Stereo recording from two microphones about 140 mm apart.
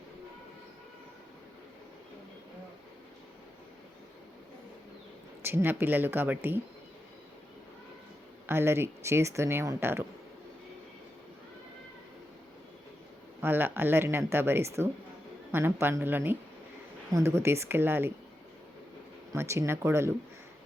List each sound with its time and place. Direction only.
5.4 s speech: 15° right (ahead or behind)
8.4 s speech: 15° right (ahead or behind)
13.4 s speech: 15° right (ahead or behind)
19.3 s speech: 20° right (ahead or behind)